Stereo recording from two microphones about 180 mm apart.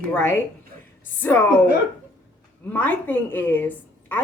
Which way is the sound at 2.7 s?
10° left (ahead or behind).